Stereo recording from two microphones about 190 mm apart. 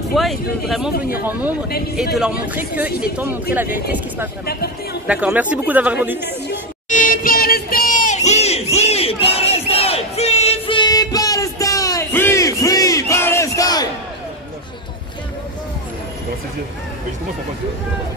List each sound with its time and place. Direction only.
0.1 s speech: centre (ahead or behind)
2.1 s speech: 5° right (ahead or behind)
3.6 s speech: 50° left (ahead or behind)
5.0 s speech: 5° right (ahead or behind)
6.9 s crowd: 45° left (ahead or behind); by 13.8 s 20° left (ahead or behind)